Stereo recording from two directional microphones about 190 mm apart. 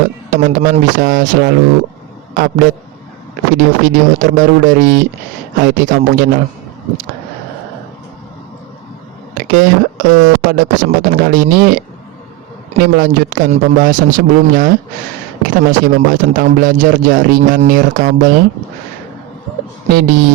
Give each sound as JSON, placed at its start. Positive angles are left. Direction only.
{"t": 0.3, "sound": "speech", "side_deg": -45}
{"t": 9.5, "sound": "speech", "side_deg": -45}
{"t": 12.8, "sound": "speech", "side_deg": -45}
{"t": 19.9, "sound": "speech", "side_deg": -45}